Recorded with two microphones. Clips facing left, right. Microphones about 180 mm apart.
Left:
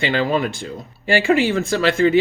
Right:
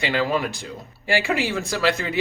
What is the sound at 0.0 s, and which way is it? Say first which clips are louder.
Speech: left 3 dB; 25° left (ahead or behind).